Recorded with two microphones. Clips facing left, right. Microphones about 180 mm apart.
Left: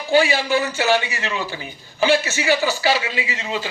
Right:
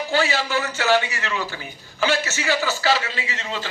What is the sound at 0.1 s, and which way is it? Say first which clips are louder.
A man's voice: left 7 dB; 15° left (ahead or behind).